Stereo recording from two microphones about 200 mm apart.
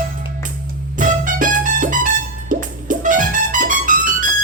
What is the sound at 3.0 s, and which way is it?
Music, 40° right (ahead or behind).